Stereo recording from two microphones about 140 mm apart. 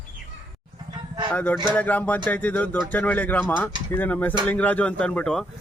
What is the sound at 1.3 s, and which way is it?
Speech, 15° left (ahead or behind).